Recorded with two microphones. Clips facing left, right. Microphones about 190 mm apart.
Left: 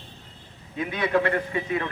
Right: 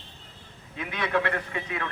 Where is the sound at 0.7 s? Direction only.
20° left (ahead or behind).